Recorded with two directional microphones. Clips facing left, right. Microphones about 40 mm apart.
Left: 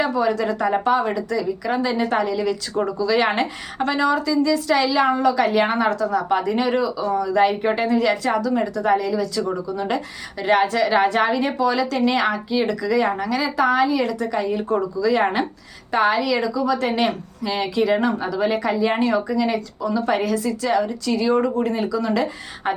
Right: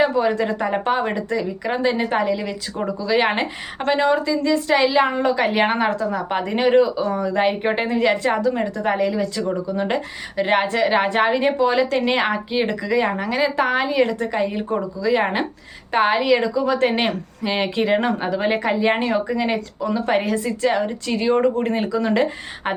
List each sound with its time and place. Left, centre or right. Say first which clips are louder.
0.0 s a woman's voice: right 2 dB; right
13.2 s a woman's voice: even; right